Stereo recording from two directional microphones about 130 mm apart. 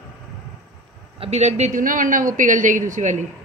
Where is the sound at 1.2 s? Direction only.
60° right (ahead or behind).